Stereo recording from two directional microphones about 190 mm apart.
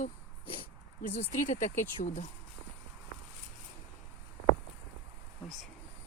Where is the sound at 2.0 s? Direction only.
40° left (ahead or behind).